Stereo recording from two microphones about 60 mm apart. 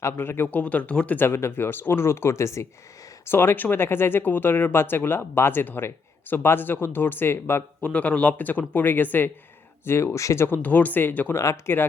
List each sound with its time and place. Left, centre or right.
0.0 s speech: left
0.4 s speech: left
1.2 s speech: left
3.2 s speech: left
7.8 s speech: left
9.8 s speech: left
10.5 s speech: left
11.3 s speech: left